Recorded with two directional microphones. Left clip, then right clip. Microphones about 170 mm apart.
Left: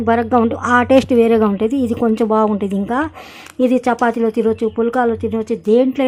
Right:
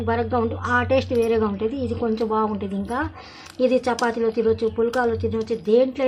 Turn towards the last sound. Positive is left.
turn(degrees=50)  # may be behind; listen again after turning